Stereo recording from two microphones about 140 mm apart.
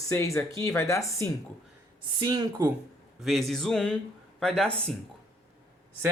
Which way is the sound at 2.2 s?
35° right (ahead or behind).